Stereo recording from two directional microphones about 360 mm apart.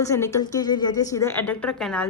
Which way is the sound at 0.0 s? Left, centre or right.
Centre.